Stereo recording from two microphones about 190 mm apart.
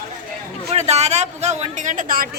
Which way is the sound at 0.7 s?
35° right (ahead or behind).